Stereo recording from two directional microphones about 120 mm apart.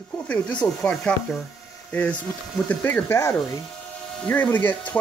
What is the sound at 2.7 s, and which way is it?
Speech, 15° left (ahead or behind).